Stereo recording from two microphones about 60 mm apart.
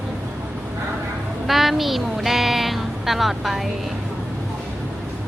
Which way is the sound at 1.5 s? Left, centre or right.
Centre.